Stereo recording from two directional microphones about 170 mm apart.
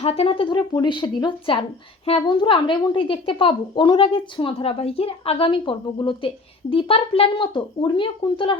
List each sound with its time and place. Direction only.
0.0 s a woman's voice: 35° left (ahead or behind)